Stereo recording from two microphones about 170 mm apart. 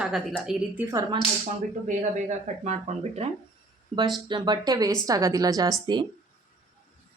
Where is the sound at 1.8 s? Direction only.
45° right (ahead or behind); by 6.0 s 25° right (ahead or behind).